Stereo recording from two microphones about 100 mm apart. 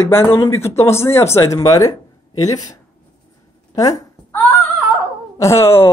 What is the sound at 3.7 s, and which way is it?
Speech, 35° left (ahead or behind).